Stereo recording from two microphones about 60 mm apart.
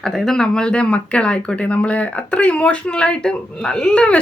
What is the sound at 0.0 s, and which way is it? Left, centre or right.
Speech, centre.